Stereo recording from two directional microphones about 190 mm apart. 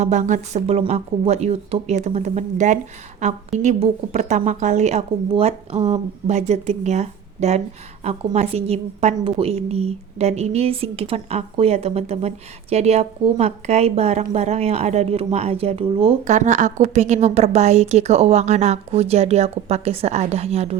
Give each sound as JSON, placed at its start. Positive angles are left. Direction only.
{"t": 0.0, "sound": "a woman's voice", "side_deg": -40}